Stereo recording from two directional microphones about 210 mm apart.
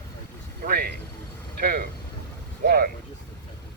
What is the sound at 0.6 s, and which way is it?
Vehicle, 45° right (ahead or behind).